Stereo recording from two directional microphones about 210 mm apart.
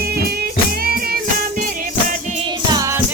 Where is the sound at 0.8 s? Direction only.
45° right (ahead or behind).